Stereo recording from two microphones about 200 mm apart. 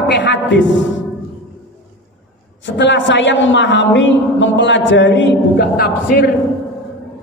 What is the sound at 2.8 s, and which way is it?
A man's voice, 65° left (ahead or behind).